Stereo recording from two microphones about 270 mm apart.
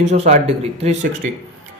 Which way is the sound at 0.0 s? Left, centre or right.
Right.